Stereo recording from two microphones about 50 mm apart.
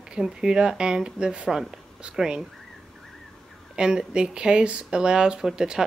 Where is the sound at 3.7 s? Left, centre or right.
Centre.